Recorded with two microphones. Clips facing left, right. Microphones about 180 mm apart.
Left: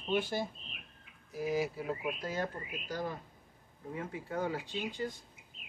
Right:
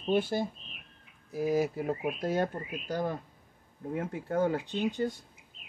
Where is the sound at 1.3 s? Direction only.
50° right (ahead or behind).